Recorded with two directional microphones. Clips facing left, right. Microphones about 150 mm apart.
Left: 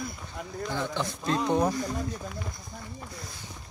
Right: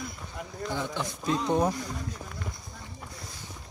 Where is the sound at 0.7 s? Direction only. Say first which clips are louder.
Left 1 dB; 10° right (ahead or behind).